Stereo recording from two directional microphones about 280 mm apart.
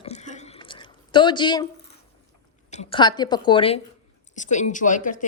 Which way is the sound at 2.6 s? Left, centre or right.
Left.